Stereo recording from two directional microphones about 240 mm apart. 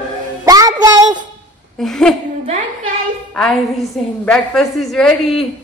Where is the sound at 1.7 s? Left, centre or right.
Centre.